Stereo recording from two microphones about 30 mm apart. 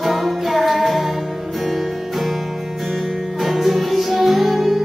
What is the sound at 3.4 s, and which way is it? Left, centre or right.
Music, centre.